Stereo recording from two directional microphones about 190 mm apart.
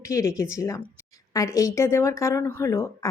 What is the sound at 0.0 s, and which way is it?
Speech, 15° left (ahead or behind).